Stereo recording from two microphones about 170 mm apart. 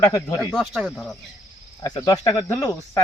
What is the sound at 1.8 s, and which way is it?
Speech, 20° left (ahead or behind).